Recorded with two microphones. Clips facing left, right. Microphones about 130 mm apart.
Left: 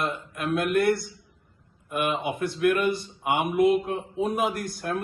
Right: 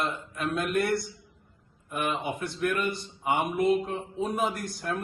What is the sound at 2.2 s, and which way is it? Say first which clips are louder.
Speech: left 5 dB; 55° left (ahead or behind).